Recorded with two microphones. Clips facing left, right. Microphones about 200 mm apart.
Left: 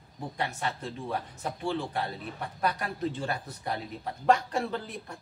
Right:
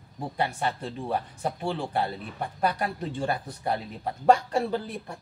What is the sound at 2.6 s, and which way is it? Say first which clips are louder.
A man's voice: right 3 dB; 30° right (ahead or behind).